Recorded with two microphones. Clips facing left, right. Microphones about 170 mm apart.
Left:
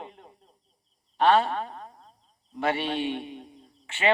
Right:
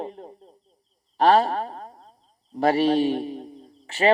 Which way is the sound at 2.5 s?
40° right (ahead or behind).